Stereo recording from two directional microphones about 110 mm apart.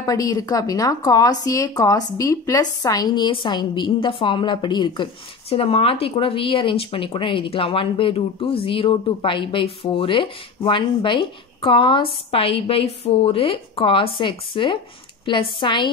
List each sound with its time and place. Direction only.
0.0 s speech: 35° left (ahead or behind); by 15.9 s 50° left (ahead or behind)